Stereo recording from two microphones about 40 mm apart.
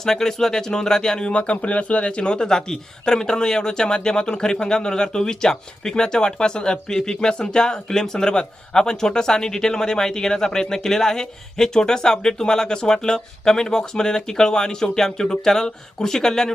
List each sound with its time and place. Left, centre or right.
0.0 s speech: centre
1.3 s speech: left; by 16.5 s centre